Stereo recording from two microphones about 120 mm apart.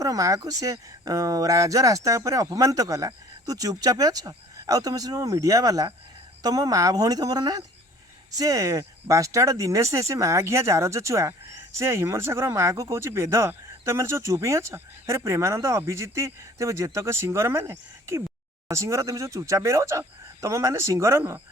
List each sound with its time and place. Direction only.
0.0 s speech: 30° right (ahead or behind)